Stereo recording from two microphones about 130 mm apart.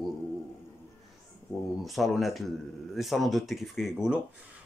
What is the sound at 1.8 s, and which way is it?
Speech, centre (ahead or behind).